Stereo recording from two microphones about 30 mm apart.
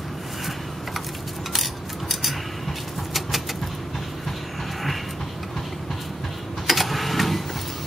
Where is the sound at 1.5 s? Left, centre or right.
Centre.